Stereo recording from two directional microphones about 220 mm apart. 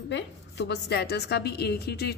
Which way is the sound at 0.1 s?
50° left (ahead or behind).